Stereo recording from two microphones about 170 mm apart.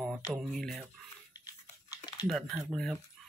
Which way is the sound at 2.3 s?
Centre (ahead or behind).